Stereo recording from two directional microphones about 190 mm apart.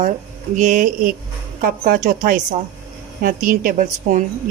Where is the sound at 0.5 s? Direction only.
40° right (ahead or behind).